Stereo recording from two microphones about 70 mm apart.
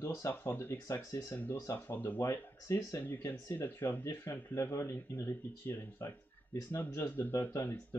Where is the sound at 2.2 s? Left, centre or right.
Left.